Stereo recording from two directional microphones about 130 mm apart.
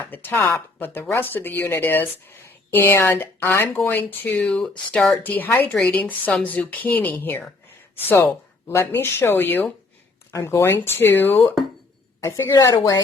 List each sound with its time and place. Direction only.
0.0 s a woman's voice: 15° left (ahead or behind)
12.5 s speech: 25° left (ahead or behind)